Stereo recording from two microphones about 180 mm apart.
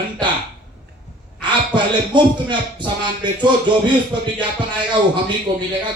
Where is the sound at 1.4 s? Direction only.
25° right (ahead or behind).